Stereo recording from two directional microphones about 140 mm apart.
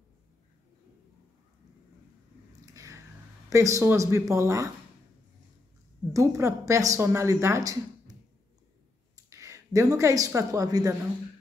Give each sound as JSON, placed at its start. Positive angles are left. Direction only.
{"t": 2.6, "sound": "a sound", "side_deg": -25}
{"t": 3.4, "sound": "a woman's voice", "side_deg": -20}
{"t": 6.1, "sound": "a woman's voice", "side_deg": -20}